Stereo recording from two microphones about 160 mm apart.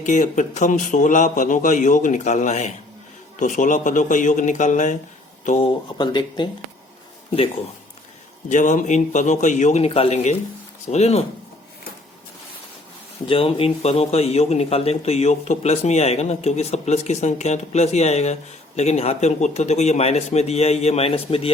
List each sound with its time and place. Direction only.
0.0 s a man's voice: 50° left (ahead or behind)
5.5 s speech: 30° left (ahead or behind)
8.4 s a man's voice: 50° left (ahead or behind)
13.2 s a man's voice: 35° left (ahead or behind)